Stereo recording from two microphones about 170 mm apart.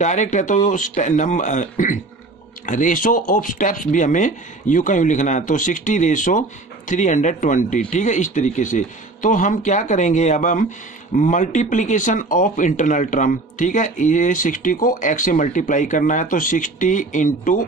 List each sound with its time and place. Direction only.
0.0 s speech: 45° left (ahead or behind)